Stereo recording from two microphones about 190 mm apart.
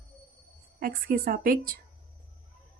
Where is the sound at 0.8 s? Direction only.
50° right (ahead or behind).